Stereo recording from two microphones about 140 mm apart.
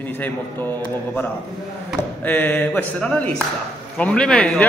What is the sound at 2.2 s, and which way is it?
A man's voice, 10° left (ahead or behind).